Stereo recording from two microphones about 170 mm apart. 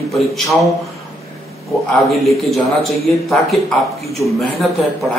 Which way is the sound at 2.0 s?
Centre (ahead or behind).